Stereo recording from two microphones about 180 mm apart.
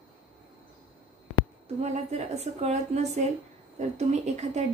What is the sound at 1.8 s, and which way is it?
Speech, 35° right (ahead or behind).